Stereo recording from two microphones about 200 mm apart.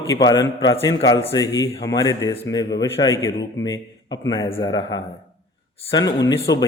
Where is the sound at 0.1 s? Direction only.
20° left (ahead or behind).